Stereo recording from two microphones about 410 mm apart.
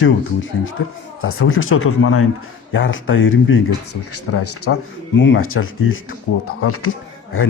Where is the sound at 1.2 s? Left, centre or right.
Left.